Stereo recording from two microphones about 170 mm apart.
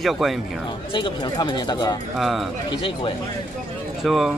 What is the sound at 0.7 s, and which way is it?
Speech, 30° left (ahead or behind).